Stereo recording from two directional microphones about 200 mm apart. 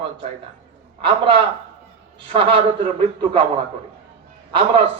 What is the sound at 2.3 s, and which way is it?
Speech, 25° right (ahead or behind).